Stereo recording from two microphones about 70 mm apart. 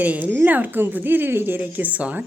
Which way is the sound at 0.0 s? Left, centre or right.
Right.